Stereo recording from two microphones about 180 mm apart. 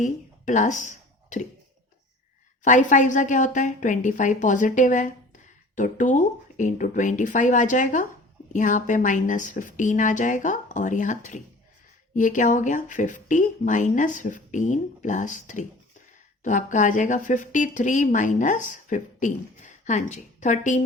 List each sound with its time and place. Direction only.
0.0 s speech: 45° left (ahead or behind)
2.6 s speech: 45° left (ahead or behind)